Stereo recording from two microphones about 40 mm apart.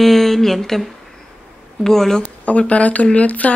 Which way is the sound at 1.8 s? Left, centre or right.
Centre.